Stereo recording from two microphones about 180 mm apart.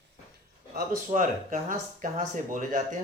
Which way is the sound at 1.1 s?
40° right (ahead or behind).